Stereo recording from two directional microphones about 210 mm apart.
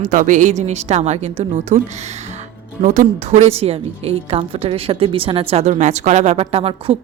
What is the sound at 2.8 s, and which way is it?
A woman's voice, 35° right (ahead or behind).